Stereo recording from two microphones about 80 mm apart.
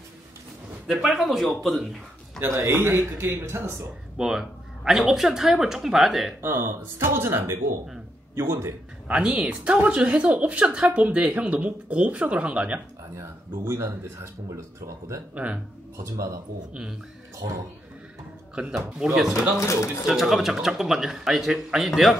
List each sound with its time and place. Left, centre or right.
0.8 s speech: centre
2.4 s speech: right
4.2 s speech: centre
6.4 s speech: right
9.0 s a woman's voice: centre
13.7 s speech: right
15.3 s speech: centre
16.0 s speech: right
18.5 s speech: centre
19.6 s speech: left
20.1 s speech: centre